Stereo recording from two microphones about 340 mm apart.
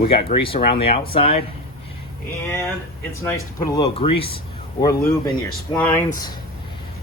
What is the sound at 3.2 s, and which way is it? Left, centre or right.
Speech, centre.